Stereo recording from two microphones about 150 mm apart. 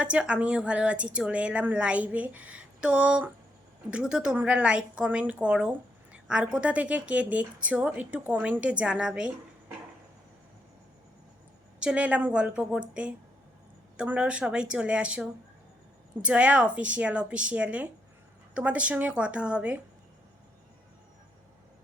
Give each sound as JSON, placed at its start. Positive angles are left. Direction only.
{"t": 0.0, "sound": "speech", "side_deg": -5}
{"t": 11.8, "sound": "speech", "side_deg": -5}